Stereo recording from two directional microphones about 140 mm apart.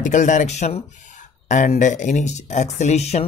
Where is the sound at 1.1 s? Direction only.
65° left (ahead or behind).